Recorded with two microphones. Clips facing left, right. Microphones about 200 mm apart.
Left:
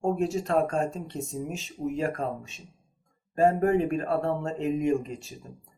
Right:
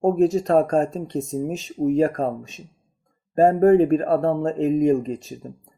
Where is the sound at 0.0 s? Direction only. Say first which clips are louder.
Right 8 dB; 35° right (ahead or behind).